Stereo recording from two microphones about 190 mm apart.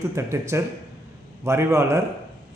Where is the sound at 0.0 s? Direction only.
15° right (ahead or behind).